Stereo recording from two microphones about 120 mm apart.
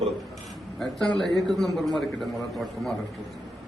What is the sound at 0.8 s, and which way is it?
A man's voice, 5° left (ahead or behind).